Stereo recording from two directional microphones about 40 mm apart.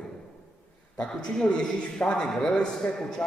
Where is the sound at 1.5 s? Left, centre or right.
Left.